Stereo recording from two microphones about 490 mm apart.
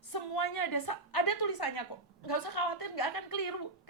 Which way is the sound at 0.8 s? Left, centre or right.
Left.